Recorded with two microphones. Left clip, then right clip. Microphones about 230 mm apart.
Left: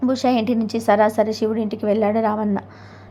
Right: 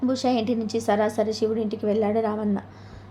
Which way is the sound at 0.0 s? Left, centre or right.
Centre.